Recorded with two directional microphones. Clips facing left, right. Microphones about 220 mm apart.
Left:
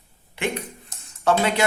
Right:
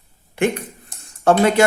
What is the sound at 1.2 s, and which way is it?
Speech, 45° right (ahead or behind).